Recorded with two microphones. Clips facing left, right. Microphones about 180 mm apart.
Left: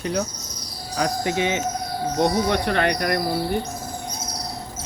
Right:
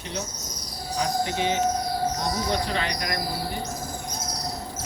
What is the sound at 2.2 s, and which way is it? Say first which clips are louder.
Speech: left 6 dB; 65° left (ahead or behind).